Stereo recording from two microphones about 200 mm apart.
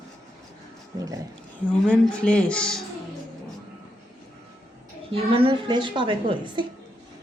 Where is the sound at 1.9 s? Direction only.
5° left (ahead or behind).